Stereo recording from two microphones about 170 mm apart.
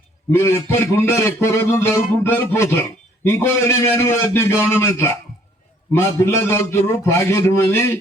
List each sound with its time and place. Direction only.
0.3 s a man's voice: 15° left (ahead or behind)